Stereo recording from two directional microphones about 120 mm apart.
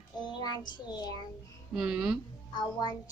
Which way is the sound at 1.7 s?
5° right (ahead or behind).